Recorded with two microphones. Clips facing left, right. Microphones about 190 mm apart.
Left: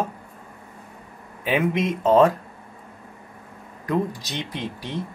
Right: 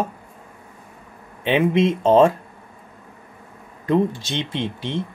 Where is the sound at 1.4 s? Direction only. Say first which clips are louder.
Right 5 dB; 25° right (ahead or behind).